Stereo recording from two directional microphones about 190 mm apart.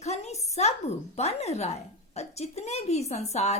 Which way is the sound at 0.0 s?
35° left (ahead or behind).